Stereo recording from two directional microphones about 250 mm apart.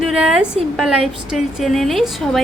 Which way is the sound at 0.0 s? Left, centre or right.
Centre.